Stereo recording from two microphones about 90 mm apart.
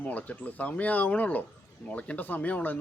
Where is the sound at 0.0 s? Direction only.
15° left (ahead or behind).